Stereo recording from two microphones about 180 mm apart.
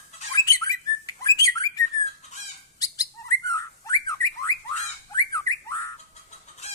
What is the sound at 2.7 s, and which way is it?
Bird, 20° left (ahead or behind).